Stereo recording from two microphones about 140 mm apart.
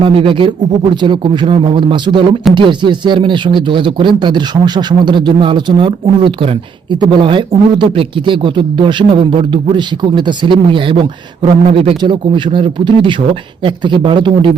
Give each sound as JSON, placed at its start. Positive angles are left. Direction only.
{"t": 0.0, "sound": "a man's voice", "side_deg": -40}